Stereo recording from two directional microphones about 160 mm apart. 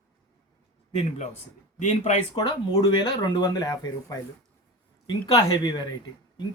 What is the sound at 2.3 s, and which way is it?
Speech, 30° left (ahead or behind).